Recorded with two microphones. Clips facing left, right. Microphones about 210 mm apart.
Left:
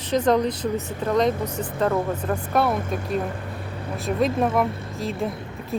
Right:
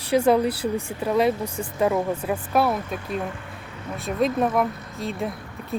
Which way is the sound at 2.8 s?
45° left (ahead or behind).